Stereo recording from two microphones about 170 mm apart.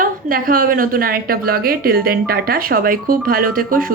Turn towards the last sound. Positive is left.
turn(degrees=-55)  # may be behind; listen again after turning